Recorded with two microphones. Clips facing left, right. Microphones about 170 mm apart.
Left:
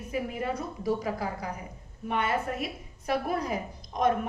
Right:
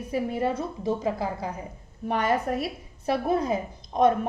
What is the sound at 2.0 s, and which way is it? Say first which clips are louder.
Speech: right 4 dB; 40° right (ahead or behind).